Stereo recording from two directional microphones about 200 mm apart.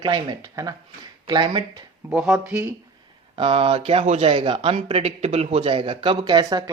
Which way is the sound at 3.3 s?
25° right (ahead or behind).